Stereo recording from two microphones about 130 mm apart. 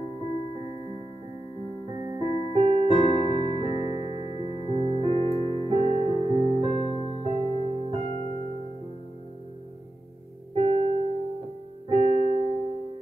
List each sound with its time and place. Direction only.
2.0 s keyboard: 35° right (ahead or behind)
7.2 s music: 45° right (ahead or behind)
10.5 s music: 45° right (ahead or behind)
11.9 s keyboard: 45° right (ahead or behind)